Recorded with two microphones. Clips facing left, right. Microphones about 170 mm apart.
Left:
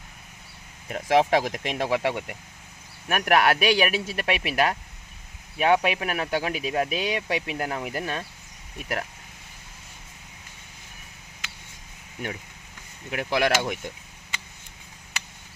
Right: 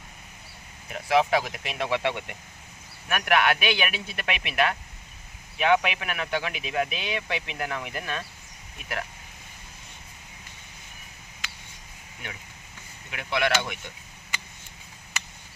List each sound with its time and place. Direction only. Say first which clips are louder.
0.9 s speech: left 2 dB; 45° left (ahead or behind)
13.1 s speech: left 3 dB; 40° left (ahead or behind)